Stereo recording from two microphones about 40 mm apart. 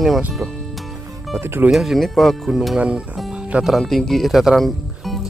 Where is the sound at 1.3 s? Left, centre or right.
Right.